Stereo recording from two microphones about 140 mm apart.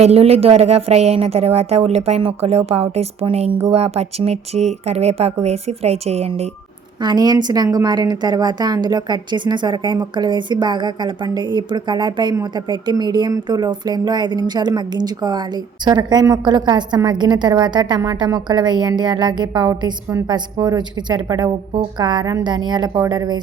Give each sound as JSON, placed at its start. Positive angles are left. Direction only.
{"t": 0.0, "sound": "a woman's voice", "side_deg": -45}
{"t": 7.0, "sound": "a woman's voice", "side_deg": -30}